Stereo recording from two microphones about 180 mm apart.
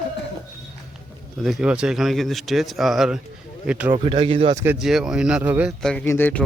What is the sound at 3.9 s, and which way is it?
Speech, 30° right (ahead or behind).